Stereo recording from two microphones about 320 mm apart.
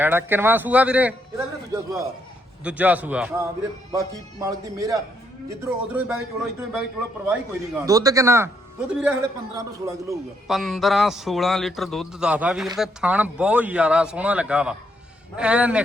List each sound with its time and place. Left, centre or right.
0.0 s a man's voice: centre